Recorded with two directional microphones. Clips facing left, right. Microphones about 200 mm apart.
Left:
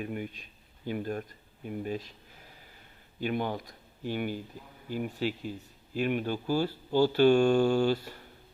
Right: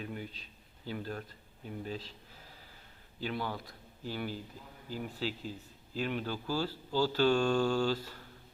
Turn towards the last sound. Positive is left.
turn(degrees=20)  # may be behind; listen again after turning